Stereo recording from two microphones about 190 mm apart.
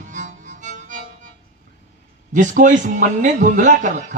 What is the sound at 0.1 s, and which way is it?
Music, 40° right (ahead or behind).